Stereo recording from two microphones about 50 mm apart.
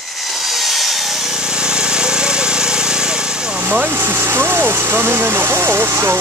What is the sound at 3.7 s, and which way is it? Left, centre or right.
Speech, right.